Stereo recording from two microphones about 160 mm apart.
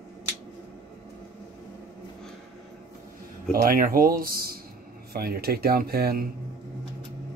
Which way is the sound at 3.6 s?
60° right (ahead or behind).